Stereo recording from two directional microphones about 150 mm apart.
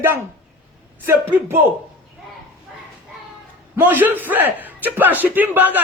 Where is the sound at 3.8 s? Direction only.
10° right (ahead or behind).